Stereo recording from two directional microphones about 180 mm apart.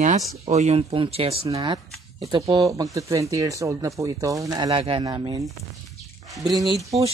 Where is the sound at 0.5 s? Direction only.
35° right (ahead or behind).